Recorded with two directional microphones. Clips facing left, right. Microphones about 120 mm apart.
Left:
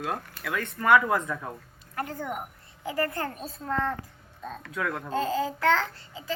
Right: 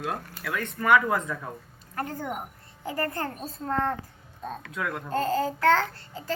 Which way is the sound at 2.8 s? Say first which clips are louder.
Left 1 dB; 35° right (ahead or behind).